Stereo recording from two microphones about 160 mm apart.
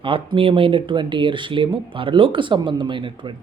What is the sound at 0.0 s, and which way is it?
Speech, 35° right (ahead or behind).